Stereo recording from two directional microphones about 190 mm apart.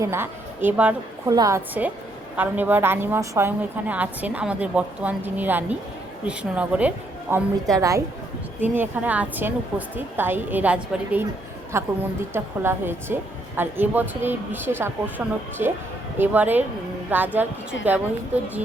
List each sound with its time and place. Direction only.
0.0 s a woman's voice: 15° right (ahead or behind)